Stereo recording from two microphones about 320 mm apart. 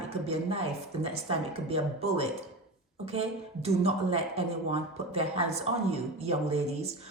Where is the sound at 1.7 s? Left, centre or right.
Centre.